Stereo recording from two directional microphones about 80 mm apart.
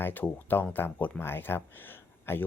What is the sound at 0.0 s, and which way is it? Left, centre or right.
Speech, left.